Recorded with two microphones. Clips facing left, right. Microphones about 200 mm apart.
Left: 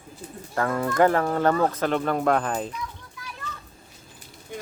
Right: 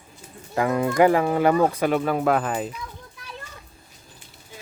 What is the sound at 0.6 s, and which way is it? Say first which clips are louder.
Speech: right 2 dB; 15° right (ahead or behind).